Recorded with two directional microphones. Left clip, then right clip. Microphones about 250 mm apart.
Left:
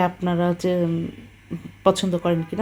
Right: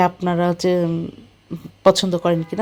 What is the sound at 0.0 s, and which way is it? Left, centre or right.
Speech, centre.